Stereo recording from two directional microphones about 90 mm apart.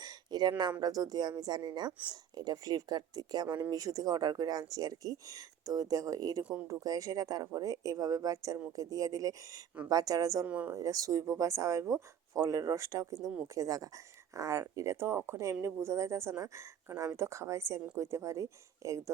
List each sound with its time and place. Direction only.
0.0 s a sound: 50° right (ahead or behind)
0.8 s speech: 45° right (ahead or behind)
6.4 s speech: 15° right (ahead or behind)
6.7 s speech: 40° right (ahead or behind)
10.4 s speech: 15° right (ahead or behind)
10.8 s speech: 40° right (ahead or behind)